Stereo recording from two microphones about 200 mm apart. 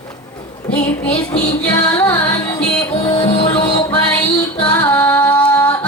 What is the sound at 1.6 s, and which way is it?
Music, 10° left (ahead or behind).